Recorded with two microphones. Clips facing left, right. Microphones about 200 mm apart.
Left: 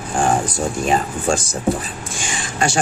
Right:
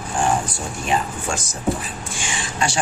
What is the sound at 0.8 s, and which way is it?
Speech, 40° left (ahead or behind).